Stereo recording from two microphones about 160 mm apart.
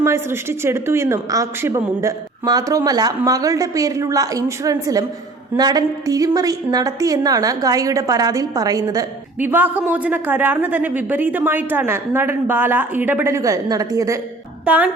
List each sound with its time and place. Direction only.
0.0 s speech: 15° right (ahead or behind)
9.4 s a woman's voice: 10° right (ahead or behind)
14.6 s speech: 10° right (ahead or behind)